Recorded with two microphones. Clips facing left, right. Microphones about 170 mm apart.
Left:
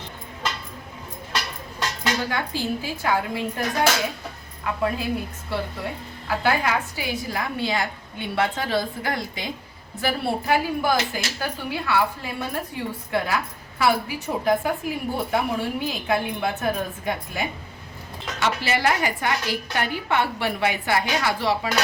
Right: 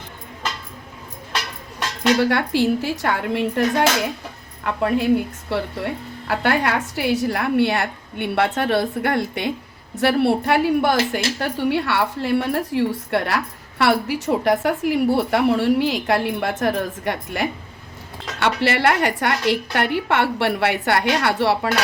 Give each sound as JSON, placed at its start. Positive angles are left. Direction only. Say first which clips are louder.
{"t": 2.3, "sound": "a woman's voice", "louder": "right 8 dB", "side_deg": -75}